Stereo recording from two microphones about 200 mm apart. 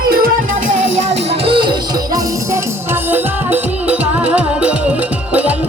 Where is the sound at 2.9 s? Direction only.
10° right (ahead or behind).